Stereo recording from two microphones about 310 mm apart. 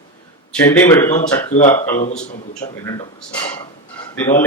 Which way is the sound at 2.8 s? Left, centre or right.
Centre.